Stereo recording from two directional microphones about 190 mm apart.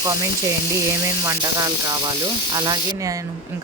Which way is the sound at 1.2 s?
20° right (ahead or behind).